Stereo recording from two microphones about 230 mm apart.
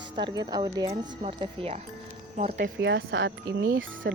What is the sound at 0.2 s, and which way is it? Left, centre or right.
Speech, centre.